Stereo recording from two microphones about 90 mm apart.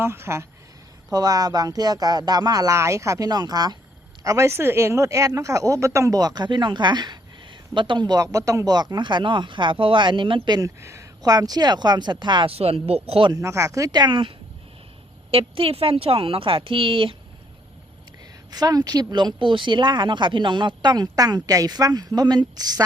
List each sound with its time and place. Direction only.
0.0 s speech: 30° right (ahead or behind)
1.1 s speech: 45° right (ahead or behind)
3.2 s speech: 50° right (ahead or behind); by 10.6 s 65° right (ahead or behind)
10.6 s speech: 30° right (ahead or behind)
11.2 s speech: 45° right (ahead or behind); by 13.3 s 90° right
13.3 s speech: 35° right (ahead or behind); by 14.3 s 65° right (ahead or behind)
15.3 s speech: 90° right; by 17.2 s 70° right (ahead or behind)
18.5 s speech: 45° right (ahead or behind)